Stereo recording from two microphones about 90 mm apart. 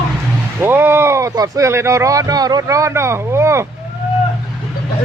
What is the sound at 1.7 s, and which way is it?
Speech, 30° right (ahead or behind).